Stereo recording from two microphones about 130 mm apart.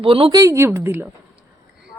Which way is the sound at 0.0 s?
45° right (ahead or behind).